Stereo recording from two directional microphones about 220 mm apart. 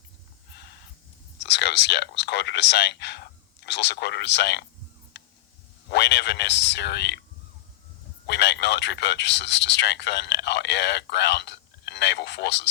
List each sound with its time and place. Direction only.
1.4 s speech: 50° left (ahead or behind)
5.2 s a sound: 50° left (ahead or behind)
5.9 s speech: 50° left (ahead or behind)
8.3 s speech: 50° left (ahead or behind)